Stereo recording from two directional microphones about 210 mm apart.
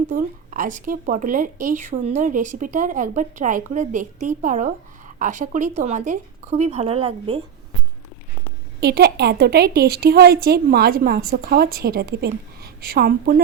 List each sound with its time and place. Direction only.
0.1 s speech: 40° right (ahead or behind)
8.8 s a woman's voice: 50° right (ahead or behind)